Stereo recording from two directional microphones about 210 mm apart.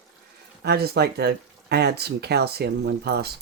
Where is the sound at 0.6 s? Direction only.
50° right (ahead or behind).